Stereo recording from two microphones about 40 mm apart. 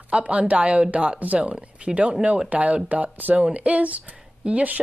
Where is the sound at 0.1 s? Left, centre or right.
Right.